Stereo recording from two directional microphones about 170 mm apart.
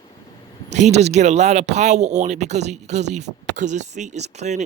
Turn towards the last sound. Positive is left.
turn(degrees=-40)  # may be behind; listen again after turning